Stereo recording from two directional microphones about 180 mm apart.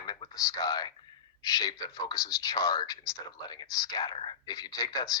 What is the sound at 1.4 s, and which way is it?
Speech, 20° left (ahead or behind).